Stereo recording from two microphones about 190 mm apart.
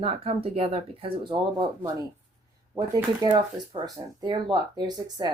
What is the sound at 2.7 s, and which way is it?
Speech, 20° right (ahead or behind).